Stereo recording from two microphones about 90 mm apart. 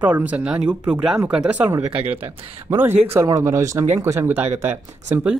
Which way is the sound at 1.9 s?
90° right.